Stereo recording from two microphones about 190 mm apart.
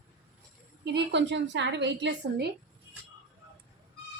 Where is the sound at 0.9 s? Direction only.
65° right (ahead or behind).